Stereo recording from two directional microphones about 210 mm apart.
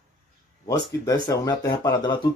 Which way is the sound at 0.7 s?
20° left (ahead or behind).